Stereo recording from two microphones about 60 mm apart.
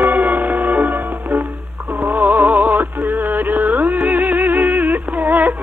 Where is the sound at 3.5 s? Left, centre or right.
Right.